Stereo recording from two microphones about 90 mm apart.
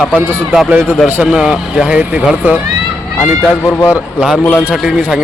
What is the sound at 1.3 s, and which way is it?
Speech, 10° right (ahead or behind).